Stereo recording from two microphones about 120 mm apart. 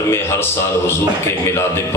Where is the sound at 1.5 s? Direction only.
20° left (ahead or behind).